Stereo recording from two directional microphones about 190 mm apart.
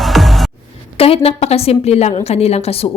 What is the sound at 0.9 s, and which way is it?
A woman's voice, 30° left (ahead or behind).